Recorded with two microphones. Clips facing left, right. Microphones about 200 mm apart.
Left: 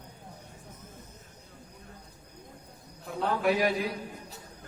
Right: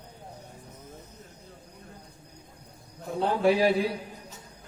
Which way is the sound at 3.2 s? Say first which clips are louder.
Right 4 dB; 30° right (ahead or behind).